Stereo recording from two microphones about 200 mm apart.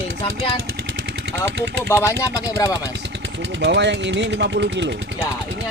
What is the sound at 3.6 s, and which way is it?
Speech, 60° right (ahead or behind).